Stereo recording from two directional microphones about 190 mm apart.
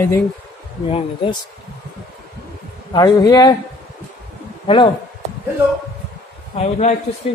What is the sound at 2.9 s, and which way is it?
Speech, 20° left (ahead or behind).